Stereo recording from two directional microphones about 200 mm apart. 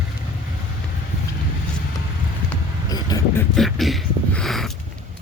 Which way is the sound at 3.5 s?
Centre (ahead or behind).